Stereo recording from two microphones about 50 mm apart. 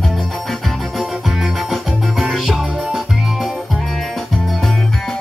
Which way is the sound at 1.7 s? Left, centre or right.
Centre.